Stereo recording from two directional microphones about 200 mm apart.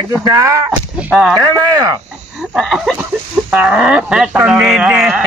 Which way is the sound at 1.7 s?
20° right (ahead or behind).